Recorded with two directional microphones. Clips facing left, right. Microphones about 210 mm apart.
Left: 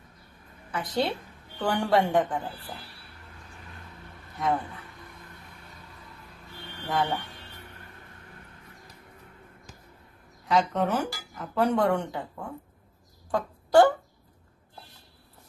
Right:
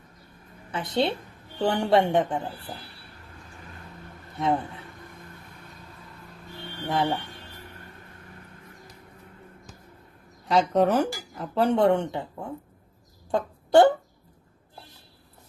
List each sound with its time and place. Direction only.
0.7 s speech: 25° right (ahead or behind)
4.4 s a man's voice: 25° right (ahead or behind)
6.8 s speech: 20° right (ahead or behind)
10.5 s speech: 30° right (ahead or behind)